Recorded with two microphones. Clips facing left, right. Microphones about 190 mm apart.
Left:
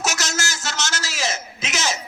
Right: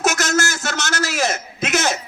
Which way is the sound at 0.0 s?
55° right (ahead or behind).